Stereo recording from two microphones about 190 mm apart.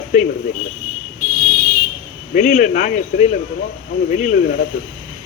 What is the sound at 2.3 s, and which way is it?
A man's voice, 45° left (ahead or behind).